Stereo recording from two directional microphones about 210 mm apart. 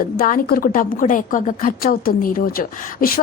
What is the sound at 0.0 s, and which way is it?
A woman's voice, 45° left (ahead or behind).